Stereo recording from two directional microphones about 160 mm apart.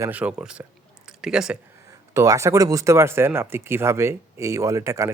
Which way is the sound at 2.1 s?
20° right (ahead or behind).